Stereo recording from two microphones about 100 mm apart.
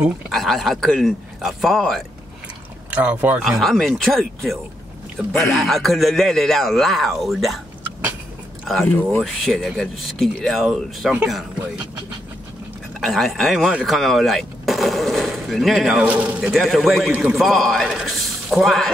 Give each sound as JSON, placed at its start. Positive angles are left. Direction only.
{"t": 0.3, "sound": "speech", "side_deg": 5}
{"t": 2.9, "sound": "speech", "side_deg": -15}
{"t": 3.4, "sound": "speech", "side_deg": 0}
{"t": 5.6, "sound": "speech", "side_deg": 0}
{"t": 8.6, "sound": "speech", "side_deg": 0}
{"t": 13.0, "sound": "speech", "side_deg": 0}
{"t": 16.1, "sound": "speech", "side_deg": -15}